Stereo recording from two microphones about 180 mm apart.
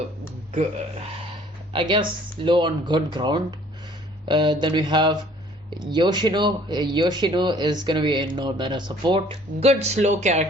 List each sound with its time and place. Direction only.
1.7 s speech: 25° right (ahead or behind)